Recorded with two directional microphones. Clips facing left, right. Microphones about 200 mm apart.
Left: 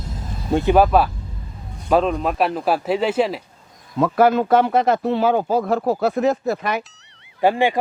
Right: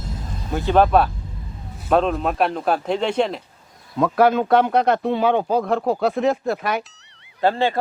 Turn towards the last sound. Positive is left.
turn(degrees=15)  # may be behind; listen again after turning